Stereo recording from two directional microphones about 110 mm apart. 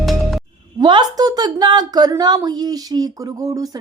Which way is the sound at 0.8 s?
40° right (ahead or behind).